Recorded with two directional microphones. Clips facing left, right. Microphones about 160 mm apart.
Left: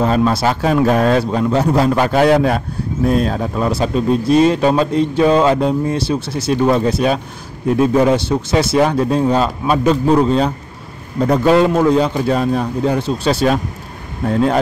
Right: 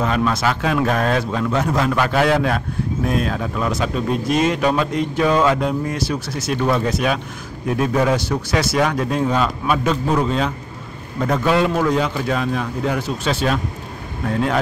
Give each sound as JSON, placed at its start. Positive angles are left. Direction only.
{"t": 0.0, "sound": "speech", "side_deg": 35}